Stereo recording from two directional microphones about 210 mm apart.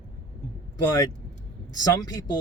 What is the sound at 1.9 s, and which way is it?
Speech, 20° left (ahead or behind).